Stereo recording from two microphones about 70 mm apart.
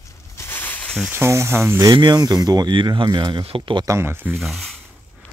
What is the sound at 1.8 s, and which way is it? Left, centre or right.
Speech, right.